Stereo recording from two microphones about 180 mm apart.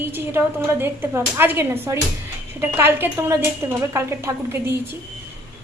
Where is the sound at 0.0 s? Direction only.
10° right (ahead or behind).